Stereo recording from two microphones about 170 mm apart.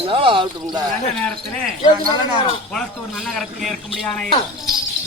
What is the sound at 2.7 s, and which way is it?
A man's voice, centre (ahead or behind).